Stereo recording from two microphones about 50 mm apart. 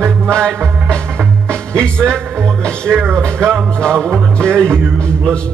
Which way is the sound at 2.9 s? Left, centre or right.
Right.